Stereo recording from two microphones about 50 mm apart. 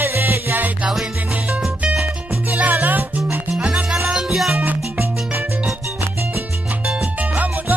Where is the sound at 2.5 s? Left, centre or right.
Right.